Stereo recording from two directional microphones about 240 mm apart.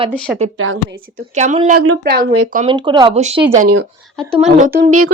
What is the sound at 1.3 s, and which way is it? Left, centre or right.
Speech, right.